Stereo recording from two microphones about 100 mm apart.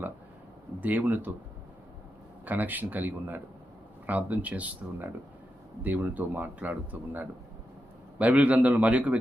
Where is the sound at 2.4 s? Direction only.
15° right (ahead or behind).